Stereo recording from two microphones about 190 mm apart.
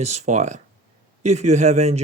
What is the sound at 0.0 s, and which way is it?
Speech, 35° right (ahead or behind).